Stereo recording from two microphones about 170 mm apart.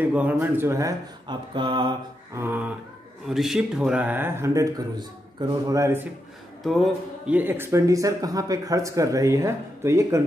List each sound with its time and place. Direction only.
0.0 s speech: 10° right (ahead or behind); by 2.0 s 30° right (ahead or behind)
2.3 s a man's voice: 10° right (ahead or behind)
6.6 s speech: centre (ahead or behind); by 10.2 s 15° right (ahead or behind)